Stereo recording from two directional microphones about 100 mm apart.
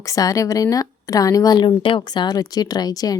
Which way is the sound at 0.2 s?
35° left (ahead or behind).